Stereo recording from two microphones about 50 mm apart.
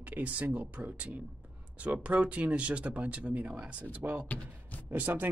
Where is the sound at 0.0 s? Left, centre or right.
Right.